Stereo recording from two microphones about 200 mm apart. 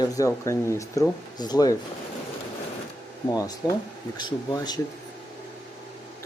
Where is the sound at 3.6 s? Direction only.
20° left (ahead or behind).